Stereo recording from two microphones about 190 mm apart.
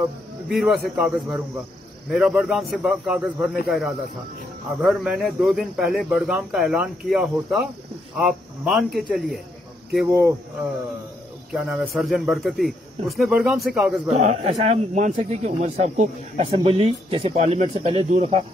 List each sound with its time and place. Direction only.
0.5 s speech: centre (ahead or behind)
11.5 s speech: 5° right (ahead or behind)
14.1 s speech: 35° right (ahead or behind)
16.4 s speech: 30° right (ahead or behind)